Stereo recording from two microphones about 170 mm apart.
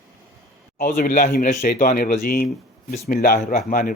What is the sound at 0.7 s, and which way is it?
Speech, 55° left (ahead or behind).